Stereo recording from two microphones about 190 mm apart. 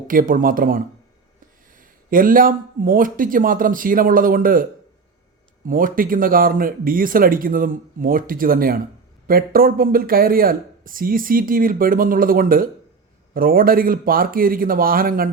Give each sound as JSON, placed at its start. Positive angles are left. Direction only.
{"t": 0.1, "sound": "speech", "side_deg": -45}
{"t": 1.8, "sound": "speech", "side_deg": -45}
{"t": 5.6, "sound": "speech", "side_deg": -45}